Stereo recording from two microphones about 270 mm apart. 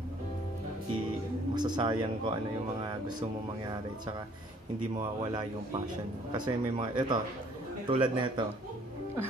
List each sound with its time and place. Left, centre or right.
1.5 s speech: centre
4.9 s speech: centre